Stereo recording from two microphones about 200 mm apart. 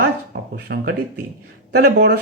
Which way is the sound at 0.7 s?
60° right (ahead or behind).